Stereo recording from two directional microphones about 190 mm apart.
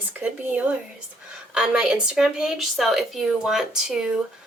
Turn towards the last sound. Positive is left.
turn(degrees=0)  # may be behind; listen again after turning